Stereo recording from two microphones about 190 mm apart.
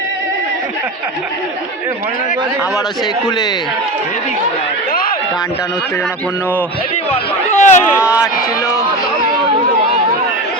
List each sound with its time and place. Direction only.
3.2 s a man's voice: 20° left (ahead or behind)
4.9 s run: 50° left (ahead or behind)
7.1 s a sound: 35° left (ahead or behind)
7.9 s run: 5° right (ahead or behind)